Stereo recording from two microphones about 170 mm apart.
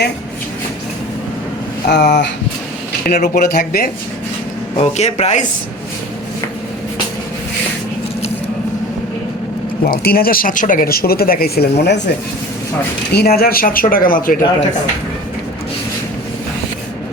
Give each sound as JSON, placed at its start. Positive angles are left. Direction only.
{"t": 1.9, "sound": "speech", "side_deg": 90}
{"t": 3.2, "sound": "speech", "side_deg": 50}
{"t": 4.8, "sound": "speech", "side_deg": 40}
{"t": 9.8, "sound": "speech", "side_deg": 60}
{"t": 11.8, "sound": "speech", "side_deg": 85}
{"t": 13.1, "sound": "speech", "side_deg": 65}